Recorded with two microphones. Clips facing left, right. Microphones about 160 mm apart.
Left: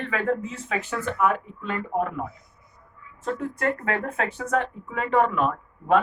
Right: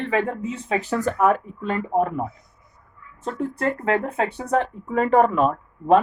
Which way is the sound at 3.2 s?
30° right (ahead or behind).